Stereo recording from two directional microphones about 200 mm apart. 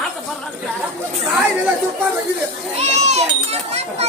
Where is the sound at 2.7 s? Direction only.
35° right (ahead or behind).